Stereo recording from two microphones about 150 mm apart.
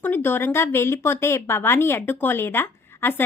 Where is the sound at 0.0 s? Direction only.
15° left (ahead or behind).